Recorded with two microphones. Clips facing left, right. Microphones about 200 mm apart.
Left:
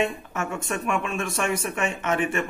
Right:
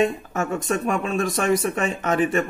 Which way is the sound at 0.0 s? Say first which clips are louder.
Right 5 dB; 35° right (ahead or behind).